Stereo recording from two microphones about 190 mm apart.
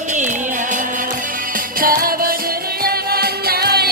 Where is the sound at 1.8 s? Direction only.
50° right (ahead or behind).